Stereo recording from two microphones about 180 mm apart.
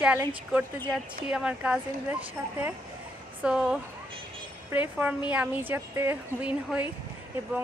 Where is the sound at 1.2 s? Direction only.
5° right (ahead or behind).